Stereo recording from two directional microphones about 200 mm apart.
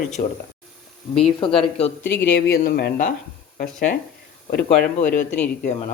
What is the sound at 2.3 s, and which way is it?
Speech, 50° left (ahead or behind).